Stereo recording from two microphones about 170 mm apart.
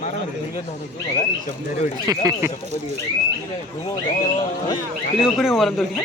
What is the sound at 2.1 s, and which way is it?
Speech, 20° right (ahead or behind).